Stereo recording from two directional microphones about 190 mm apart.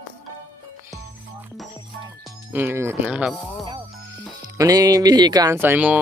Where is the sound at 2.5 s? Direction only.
10° right (ahead or behind).